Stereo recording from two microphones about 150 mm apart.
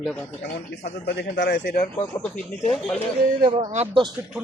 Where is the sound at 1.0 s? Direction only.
90° left.